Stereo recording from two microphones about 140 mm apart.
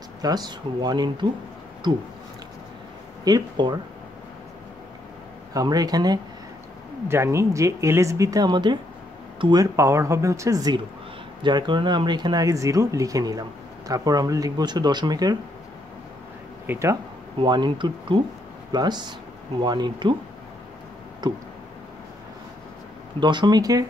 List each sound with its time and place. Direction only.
0.2 s speech: 30° right (ahead or behind)
3.3 s speech: 30° right (ahead or behind)
5.5 s speech: 25° right (ahead or behind)
16.6 s speech: 20° right (ahead or behind)
17.4 s speech: 35° right (ahead or behind)
21.2 s a sound: 30° right (ahead or behind)
23.1 s speech: 30° right (ahead or behind)